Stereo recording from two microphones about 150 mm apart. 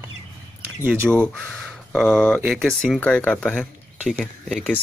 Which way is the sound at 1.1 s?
5° left (ahead or behind).